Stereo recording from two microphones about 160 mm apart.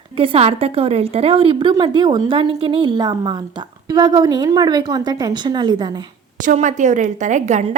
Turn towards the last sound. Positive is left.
turn(degrees=-50)  # may be behind; listen again after turning